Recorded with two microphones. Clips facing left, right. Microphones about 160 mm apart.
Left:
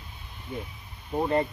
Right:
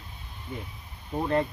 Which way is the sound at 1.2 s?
15° left (ahead or behind).